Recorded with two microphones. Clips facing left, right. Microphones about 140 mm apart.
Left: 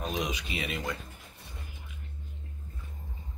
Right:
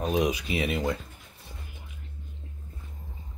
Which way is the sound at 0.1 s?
30° right (ahead or behind).